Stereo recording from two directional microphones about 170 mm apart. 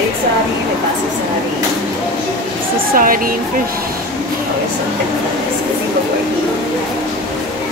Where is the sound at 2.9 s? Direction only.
55° right (ahead or behind).